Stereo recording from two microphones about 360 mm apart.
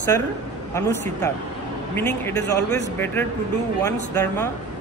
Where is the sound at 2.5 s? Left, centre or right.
Left.